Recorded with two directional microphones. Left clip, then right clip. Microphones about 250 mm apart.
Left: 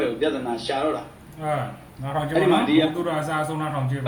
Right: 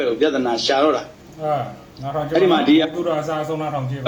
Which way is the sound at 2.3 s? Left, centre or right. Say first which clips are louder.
Right 4 dB; right.